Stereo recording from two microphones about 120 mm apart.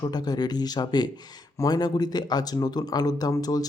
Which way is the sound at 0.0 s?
35° left (ahead or behind).